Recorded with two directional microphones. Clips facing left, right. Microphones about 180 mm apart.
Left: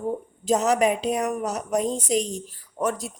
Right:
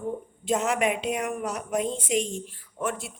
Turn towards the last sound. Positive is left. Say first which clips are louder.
# left 4 dB
turn(degrees=40)  # may be behind; listen again after turning